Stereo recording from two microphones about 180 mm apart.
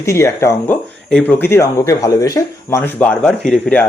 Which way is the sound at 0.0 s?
15° left (ahead or behind).